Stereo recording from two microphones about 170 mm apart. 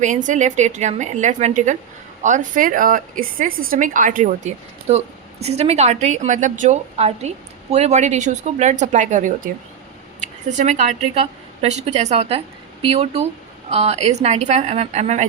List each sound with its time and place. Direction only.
0.0 s a woman's voice: 45° right (ahead or behind)